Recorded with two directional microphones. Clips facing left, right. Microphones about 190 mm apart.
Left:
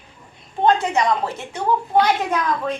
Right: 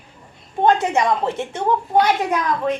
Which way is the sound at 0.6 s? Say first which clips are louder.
Right 1 dB; 25° right (ahead or behind).